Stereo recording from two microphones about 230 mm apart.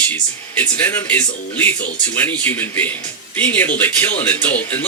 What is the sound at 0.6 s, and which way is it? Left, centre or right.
Speech, centre.